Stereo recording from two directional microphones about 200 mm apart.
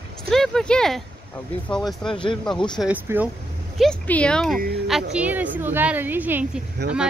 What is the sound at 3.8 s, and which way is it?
Speech, 5° left (ahead or behind).